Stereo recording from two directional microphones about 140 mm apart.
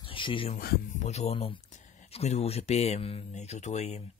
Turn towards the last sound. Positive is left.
turn(degrees=55)  # may be behind; listen again after turning